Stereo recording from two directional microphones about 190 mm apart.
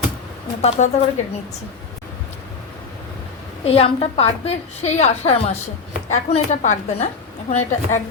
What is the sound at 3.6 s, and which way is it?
A woman's voice, 30° left (ahead or behind).